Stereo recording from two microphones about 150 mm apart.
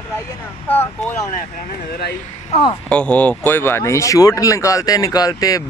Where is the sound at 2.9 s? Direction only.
10° left (ahead or behind).